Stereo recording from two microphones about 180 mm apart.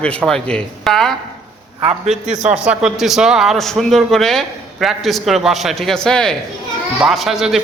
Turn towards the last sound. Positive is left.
turn(degrees=0)  # may be behind; listen again after turning